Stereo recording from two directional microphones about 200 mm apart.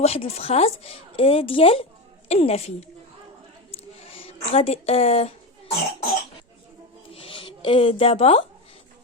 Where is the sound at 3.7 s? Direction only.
30° left (ahead or behind).